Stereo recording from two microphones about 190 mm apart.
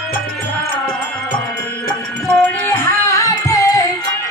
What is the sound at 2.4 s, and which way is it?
Music, 10° left (ahead or behind).